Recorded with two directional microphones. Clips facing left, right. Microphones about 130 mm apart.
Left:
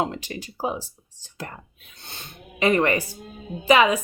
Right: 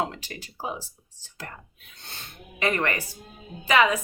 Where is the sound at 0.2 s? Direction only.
20° left (ahead or behind).